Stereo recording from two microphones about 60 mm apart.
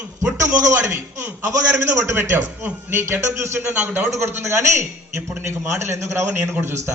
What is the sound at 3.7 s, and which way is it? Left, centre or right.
Speech, right.